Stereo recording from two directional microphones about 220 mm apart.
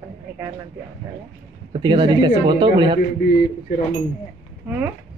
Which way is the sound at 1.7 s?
20° right (ahead or behind).